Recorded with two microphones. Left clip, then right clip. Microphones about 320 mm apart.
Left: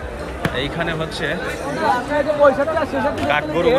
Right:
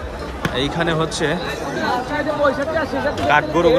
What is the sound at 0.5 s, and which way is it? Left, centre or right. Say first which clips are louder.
Speech: right 4 dB; centre.